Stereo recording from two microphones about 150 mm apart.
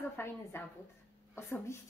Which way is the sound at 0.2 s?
15° left (ahead or behind).